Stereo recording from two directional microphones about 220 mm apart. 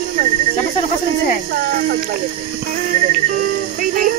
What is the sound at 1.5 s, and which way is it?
Speech, 45° right (ahead or behind).